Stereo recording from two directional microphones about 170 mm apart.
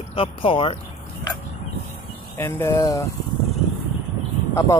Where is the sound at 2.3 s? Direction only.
15° left (ahead or behind).